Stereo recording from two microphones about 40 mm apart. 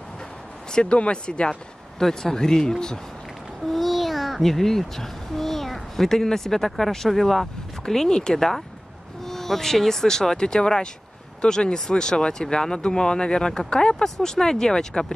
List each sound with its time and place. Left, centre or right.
0.7 s speech: centre
2.0 s speech: centre
3.7 s a child's voice: centre; by 14.0 s left
14.0 s speech: centre